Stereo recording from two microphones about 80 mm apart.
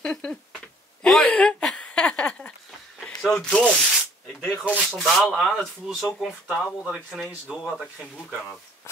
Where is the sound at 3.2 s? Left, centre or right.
Centre.